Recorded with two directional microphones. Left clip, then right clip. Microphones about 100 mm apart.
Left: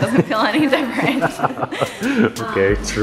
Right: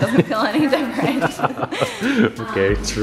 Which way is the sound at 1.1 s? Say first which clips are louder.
Left 1 dB; 15° right (ahead or behind).